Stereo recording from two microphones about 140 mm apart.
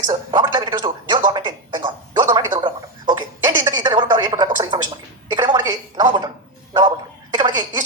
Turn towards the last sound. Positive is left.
turn(degrees=-30)  # may be behind; listen again after turning